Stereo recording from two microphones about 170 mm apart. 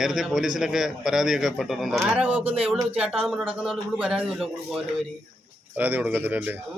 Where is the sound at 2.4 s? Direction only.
35° right (ahead or behind).